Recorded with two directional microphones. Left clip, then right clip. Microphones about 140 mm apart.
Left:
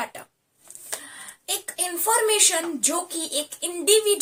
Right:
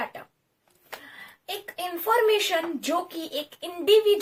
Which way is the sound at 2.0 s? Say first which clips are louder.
Left 1 dB; 5° left (ahead or behind).